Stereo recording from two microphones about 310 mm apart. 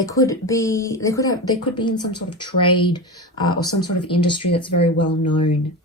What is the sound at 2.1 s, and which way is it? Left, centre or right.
Speech, left.